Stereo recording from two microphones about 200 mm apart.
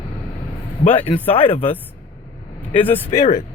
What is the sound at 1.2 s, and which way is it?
Speech, 30° left (ahead or behind).